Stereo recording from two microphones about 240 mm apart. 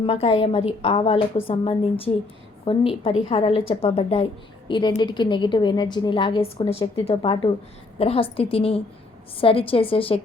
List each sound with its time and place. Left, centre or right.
0.0 s a woman's voice: left